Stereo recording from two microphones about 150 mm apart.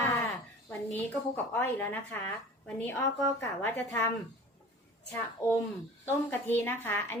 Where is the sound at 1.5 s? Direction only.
15° left (ahead or behind).